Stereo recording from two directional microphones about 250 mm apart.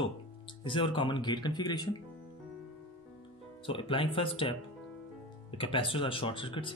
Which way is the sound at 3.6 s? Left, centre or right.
Left.